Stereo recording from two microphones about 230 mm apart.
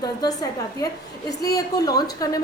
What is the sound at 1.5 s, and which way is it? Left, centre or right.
Speech, centre.